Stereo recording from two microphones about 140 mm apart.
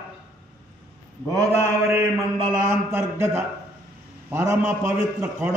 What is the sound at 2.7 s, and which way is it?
A man's voice, 20° right (ahead or behind).